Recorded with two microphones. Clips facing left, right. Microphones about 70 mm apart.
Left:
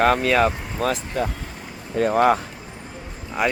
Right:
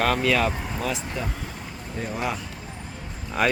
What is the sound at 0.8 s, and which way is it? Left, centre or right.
Speech, left.